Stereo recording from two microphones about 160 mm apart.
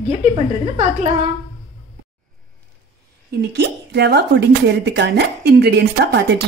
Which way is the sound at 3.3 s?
90° right.